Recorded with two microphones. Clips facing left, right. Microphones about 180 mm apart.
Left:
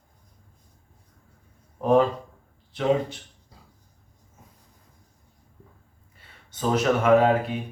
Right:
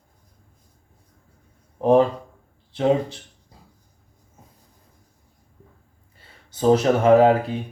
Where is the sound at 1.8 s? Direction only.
30° right (ahead or behind).